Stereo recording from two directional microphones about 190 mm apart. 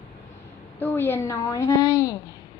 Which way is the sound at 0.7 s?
10° left (ahead or behind).